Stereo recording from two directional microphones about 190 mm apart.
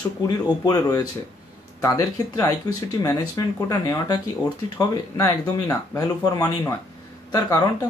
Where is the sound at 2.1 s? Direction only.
20° left (ahead or behind).